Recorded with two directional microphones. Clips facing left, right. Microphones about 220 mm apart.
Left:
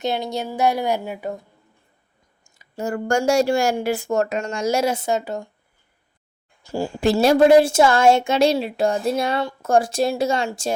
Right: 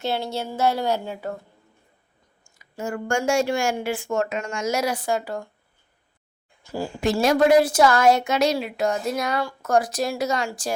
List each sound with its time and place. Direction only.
0.0 s speech: 15° left (ahead or behind)
2.4 s speech: 30° left (ahead or behind)
6.6 s a woman's voice: 30° left (ahead or behind)